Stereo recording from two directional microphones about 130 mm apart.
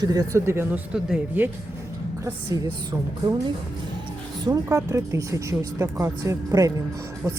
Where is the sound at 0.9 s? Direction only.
5° right (ahead or behind).